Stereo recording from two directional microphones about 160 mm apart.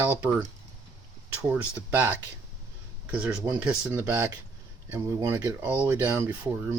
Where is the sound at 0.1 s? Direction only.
10° right (ahead or behind).